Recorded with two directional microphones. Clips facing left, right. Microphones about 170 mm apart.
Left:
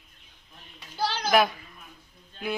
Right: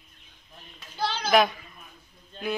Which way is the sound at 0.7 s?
10° left (ahead or behind).